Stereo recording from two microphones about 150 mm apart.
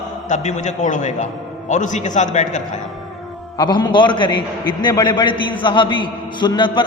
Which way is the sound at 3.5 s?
25° left (ahead or behind).